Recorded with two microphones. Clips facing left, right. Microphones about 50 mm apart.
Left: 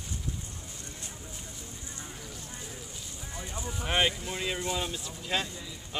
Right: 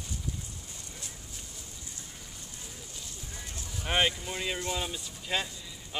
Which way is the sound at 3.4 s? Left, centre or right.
Centre.